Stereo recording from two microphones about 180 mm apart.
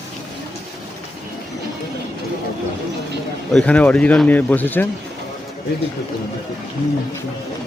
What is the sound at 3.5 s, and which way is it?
Speech, 5° left (ahead or behind).